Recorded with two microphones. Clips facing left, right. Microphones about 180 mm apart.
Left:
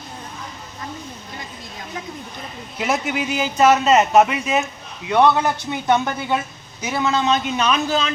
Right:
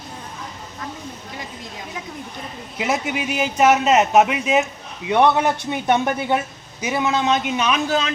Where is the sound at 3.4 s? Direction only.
15° right (ahead or behind).